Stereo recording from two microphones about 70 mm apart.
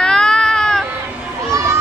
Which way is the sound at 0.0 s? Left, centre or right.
Centre.